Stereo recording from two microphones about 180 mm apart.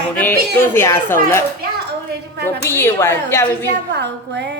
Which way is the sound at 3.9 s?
70° right (ahead or behind).